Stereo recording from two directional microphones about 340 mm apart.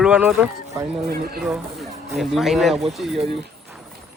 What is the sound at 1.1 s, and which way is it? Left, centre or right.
Speech, right.